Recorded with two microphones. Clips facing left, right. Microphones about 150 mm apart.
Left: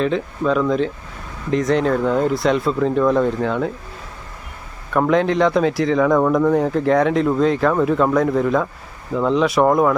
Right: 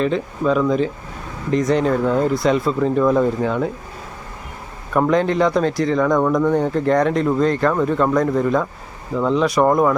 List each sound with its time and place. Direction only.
0.0 s speech: centre (ahead or behind)
4.9 s speech: centre (ahead or behind)